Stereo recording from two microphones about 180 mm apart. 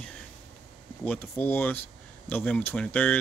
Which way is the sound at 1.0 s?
10° left (ahead or behind).